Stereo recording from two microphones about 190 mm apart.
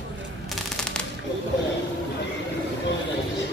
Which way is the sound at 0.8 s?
5° left (ahead or behind).